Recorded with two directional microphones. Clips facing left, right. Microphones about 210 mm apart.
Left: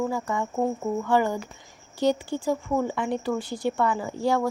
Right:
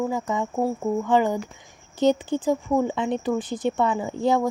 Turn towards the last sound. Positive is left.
turn(degrees=-20)  # may be behind; listen again after turning